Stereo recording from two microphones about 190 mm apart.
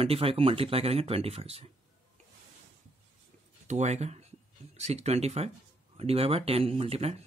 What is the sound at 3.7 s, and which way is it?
Speech, 35° right (ahead or behind).